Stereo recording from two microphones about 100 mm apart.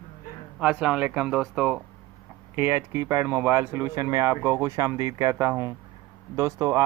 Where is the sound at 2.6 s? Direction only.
20° right (ahead or behind).